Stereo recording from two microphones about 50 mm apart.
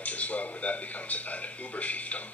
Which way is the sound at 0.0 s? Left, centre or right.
Left.